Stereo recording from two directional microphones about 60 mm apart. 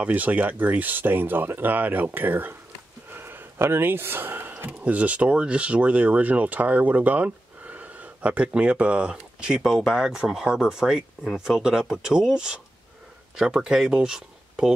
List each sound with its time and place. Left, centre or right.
0.0 s speech: right
3.1 s a sound: right
4.6 s speech: right